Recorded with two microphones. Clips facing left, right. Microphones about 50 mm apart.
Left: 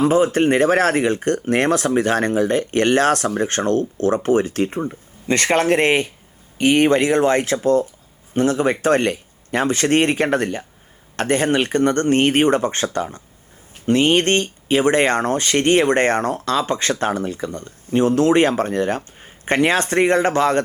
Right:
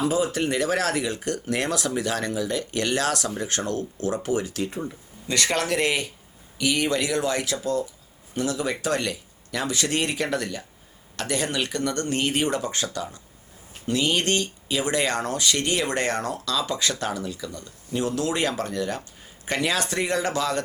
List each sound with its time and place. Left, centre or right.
0.0 s speech: left